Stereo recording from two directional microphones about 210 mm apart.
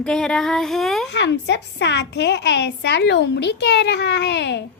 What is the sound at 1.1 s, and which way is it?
A woman's voice, 55° left (ahead or behind).